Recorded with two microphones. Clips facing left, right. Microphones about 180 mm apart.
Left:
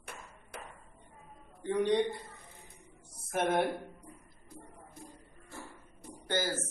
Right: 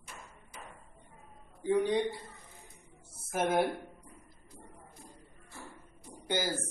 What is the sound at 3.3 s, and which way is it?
Speech, 5° right (ahead or behind).